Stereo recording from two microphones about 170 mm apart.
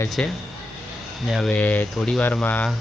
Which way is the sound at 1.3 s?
5° left (ahead or behind).